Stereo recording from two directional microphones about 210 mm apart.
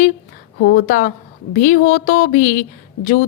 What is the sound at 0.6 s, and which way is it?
A woman's voice, 45° left (ahead or behind).